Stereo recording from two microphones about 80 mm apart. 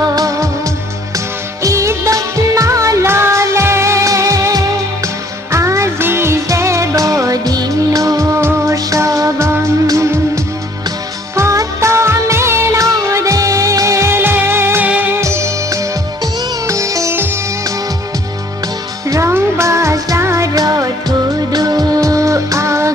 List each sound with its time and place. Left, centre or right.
0.0 s music: right
1.1 s music of bollywood: right
8.7 s music: right
11.3 s music of bollywood: right
14.9 s music: right
15.1 s music: right
19.0 s music: right